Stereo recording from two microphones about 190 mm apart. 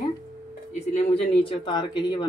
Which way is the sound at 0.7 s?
35° left (ahead or behind).